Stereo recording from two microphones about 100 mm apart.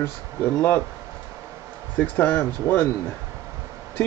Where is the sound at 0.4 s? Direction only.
10° left (ahead or behind).